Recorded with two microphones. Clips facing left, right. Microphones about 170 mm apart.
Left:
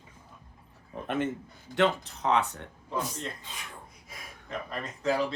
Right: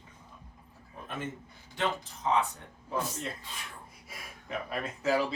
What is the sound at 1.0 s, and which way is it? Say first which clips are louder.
A man's voice: left 8 dB; 70° left (ahead or behind).